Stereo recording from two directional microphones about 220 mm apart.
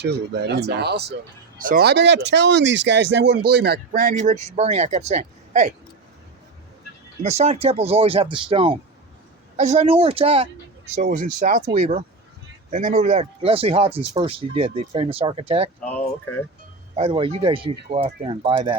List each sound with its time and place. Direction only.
0.0 s speech: 50° right (ahead or behind); by 5.7 s 30° right (ahead or behind)
7.2 s speech: 30° right (ahead or behind)
11.0 s speech: 40° right (ahead or behind)
15.8 s speech: 5° left (ahead or behind)
16.9 s speech: 25° right (ahead or behind)